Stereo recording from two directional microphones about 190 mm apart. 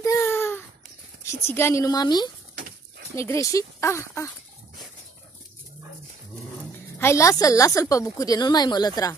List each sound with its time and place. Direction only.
0.0 s a sound: 15° left (ahead or behind)
1.2 s speech: 15° left (ahead or behind)
7.0 s a woman's voice: 15° left (ahead or behind)